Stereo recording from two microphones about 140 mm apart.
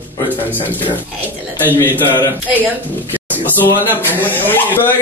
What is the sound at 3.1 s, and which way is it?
Speech, 15° left (ahead or behind).